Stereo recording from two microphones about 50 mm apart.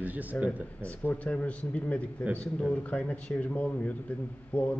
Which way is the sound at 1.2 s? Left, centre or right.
Left.